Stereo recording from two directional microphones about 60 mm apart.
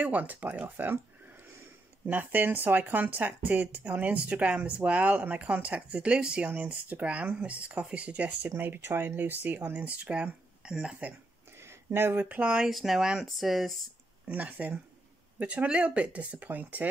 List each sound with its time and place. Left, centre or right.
0.0 s speech: right
2.0 s speech: right; by 11.0 s centre
11.6 s a sound: right
12.3 s speech: centre
12.6 s speech: centre
14.2 s speech: right